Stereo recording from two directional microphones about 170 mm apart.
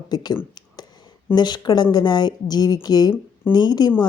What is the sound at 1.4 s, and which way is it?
A woman's voice, 25° left (ahead or behind).